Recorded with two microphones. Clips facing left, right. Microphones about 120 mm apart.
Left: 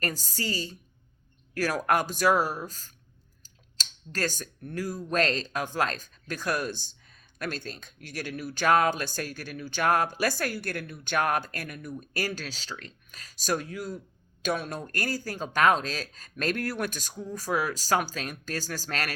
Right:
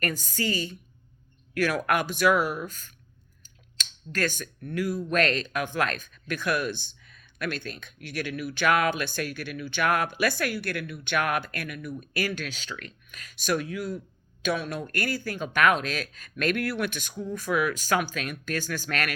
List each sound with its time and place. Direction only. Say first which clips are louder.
0.4 s speech: right 4 dB; 55° right (ahead or behind)
1.5 s speech: right 1 dB; 40° left (ahead or behind)
3.8 s a sound: right 2 dB; 35° left (ahead or behind)
4.6 s speech: right 4 dB; 40° left (ahead or behind)
7.4 s speech: right 2 dB; 55° right (ahead or behind)
8.0 s speech: right 3 dB; 40° left (ahead or behind)